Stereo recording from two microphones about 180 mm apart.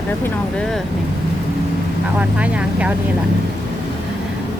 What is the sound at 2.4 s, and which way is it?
Speech, 5° right (ahead or behind).